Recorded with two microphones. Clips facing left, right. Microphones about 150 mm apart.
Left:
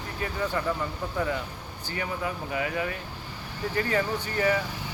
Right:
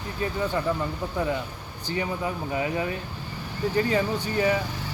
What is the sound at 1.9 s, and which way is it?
Speech, 20° right (ahead or behind).